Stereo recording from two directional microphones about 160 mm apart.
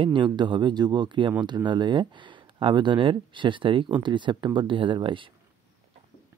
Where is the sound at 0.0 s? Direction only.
30° right (ahead or behind).